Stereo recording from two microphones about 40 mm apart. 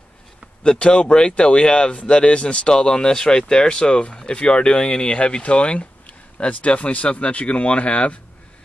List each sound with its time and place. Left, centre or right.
0.7 s speech: left